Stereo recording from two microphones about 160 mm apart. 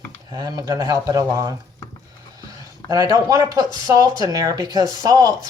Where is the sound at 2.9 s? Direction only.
20° right (ahead or behind).